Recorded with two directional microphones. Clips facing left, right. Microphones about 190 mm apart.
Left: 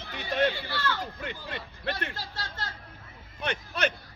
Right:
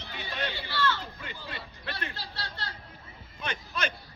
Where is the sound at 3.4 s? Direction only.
65° left (ahead or behind).